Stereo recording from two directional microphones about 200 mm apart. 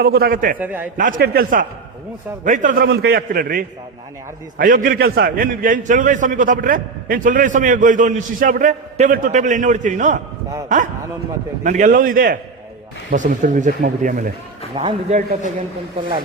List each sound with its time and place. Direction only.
0.0 s a man's voice: 50° right (ahead or behind)
0.6 s a man's voice: 10° right (ahead or behind)
1.2 s a man's voice: 50° right (ahead or behind)
11.6 s a man's voice: 40° right (ahead or behind)